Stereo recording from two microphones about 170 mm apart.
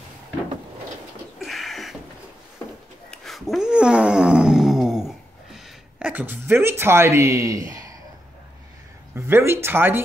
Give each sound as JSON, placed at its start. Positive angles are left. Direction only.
{"t": 1.4, "sound": "a sound", "side_deg": 0}
{"t": 3.1, "sound": "dog", "side_deg": 0}
{"t": 9.1, "sound": "speech", "side_deg": -15}